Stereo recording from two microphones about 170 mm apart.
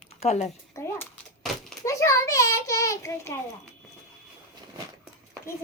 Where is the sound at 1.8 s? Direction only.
20° left (ahead or behind).